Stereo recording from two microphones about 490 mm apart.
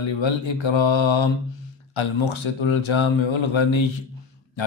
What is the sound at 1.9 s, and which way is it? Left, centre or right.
Speech, left.